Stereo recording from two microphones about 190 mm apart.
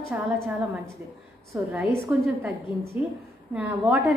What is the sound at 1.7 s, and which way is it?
A woman's voice, 5° right (ahead or behind).